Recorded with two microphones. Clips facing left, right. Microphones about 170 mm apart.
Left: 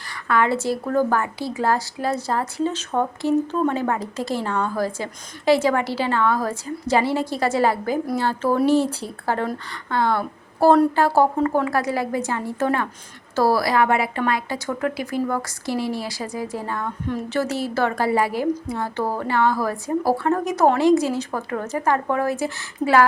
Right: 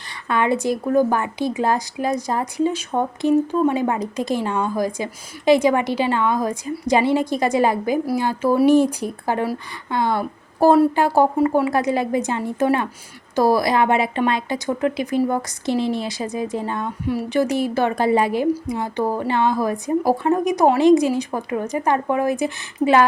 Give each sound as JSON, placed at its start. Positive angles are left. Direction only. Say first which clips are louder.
{"t": 0.3, "sound": "a woman's voice", "louder": "right 1 dB", "side_deg": -20}